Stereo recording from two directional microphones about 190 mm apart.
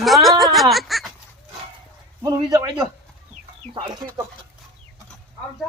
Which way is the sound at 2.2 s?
20° right (ahead or behind).